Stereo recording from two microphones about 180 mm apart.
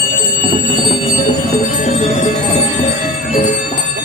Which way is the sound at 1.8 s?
35° left (ahead or behind).